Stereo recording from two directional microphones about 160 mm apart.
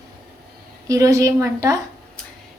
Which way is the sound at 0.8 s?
20° right (ahead or behind).